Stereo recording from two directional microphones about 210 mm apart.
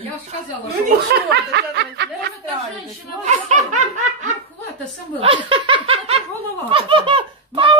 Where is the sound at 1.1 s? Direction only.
55° right (ahead or behind).